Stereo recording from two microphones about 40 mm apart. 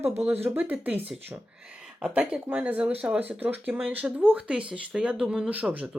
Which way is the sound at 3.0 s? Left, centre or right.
Right.